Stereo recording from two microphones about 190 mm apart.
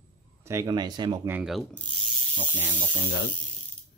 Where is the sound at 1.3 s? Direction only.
Centre (ahead or behind).